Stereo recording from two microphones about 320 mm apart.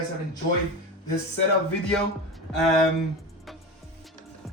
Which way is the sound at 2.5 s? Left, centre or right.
Centre.